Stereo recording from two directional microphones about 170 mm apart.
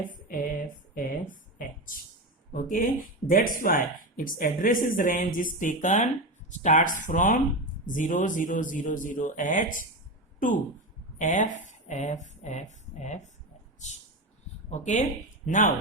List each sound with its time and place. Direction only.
0.1 s a sound: 55° left (ahead or behind)
2.5 s speech: 50° left (ahead or behind)
11.2 s speech: 45° left (ahead or behind)